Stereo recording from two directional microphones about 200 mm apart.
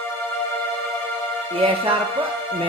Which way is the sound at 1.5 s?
25° right (ahead or behind).